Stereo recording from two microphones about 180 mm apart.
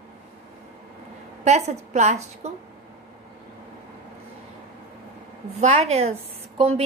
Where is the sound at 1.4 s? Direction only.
40° right (ahead or behind).